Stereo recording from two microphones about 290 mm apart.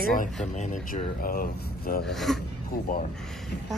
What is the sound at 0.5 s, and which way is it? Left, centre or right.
Speech, left.